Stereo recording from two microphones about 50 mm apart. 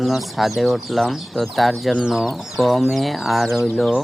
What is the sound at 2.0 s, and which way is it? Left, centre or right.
Speech, centre.